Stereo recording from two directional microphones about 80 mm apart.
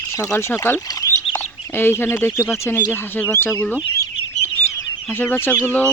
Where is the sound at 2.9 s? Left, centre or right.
Left.